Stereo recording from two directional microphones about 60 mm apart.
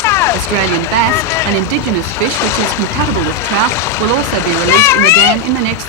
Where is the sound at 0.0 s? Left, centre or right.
Left.